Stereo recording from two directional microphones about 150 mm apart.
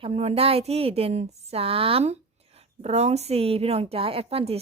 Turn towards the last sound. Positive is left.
turn(degrees=-40)  # may be behind; listen again after turning